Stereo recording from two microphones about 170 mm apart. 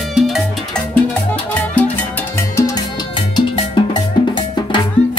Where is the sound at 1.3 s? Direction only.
10° left (ahead or behind).